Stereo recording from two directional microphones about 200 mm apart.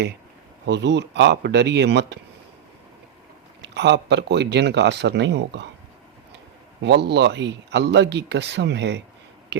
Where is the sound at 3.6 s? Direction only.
60° right (ahead or behind).